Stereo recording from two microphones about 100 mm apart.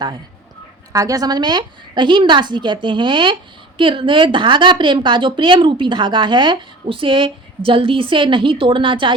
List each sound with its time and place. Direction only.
0.9 s a woman's voice: 35° right (ahead or behind); by 9.1 s 55° right (ahead or behind)